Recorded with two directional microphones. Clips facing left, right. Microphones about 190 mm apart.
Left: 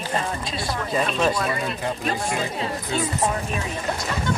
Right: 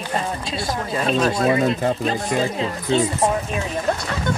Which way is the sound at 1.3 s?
40° right (ahead or behind).